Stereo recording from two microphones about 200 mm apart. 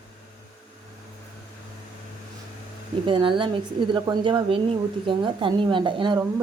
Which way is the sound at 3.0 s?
25° right (ahead or behind).